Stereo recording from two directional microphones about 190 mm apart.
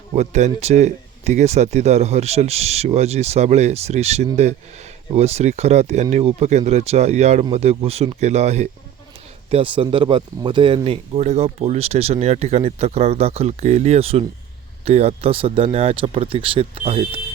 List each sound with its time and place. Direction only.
0.2 s speech: 35° right (ahead or behind)